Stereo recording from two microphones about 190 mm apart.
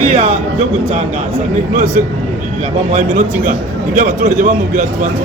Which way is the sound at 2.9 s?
45° right (ahead or behind).